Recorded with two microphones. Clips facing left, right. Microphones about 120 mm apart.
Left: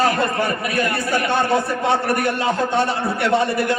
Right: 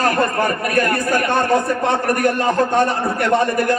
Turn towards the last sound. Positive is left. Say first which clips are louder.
# right 2 dB
turn(degrees=-45)  # may be behind; listen again after turning